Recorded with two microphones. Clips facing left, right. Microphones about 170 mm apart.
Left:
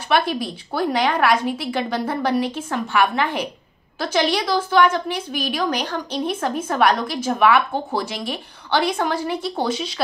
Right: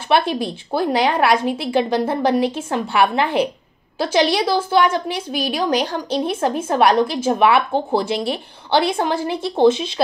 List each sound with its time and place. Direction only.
0.1 s a woman's voice: 30° right (ahead or behind)